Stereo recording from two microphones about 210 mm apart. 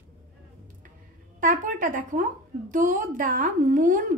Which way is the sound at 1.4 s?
40° right (ahead or behind).